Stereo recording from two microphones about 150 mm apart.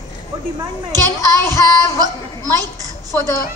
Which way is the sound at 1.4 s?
20° left (ahead or behind).